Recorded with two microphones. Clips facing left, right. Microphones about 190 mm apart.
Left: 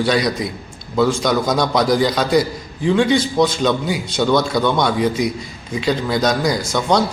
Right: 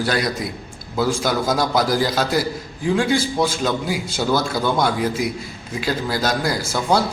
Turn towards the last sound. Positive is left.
turn(degrees=-5)  # may be behind; listen again after turning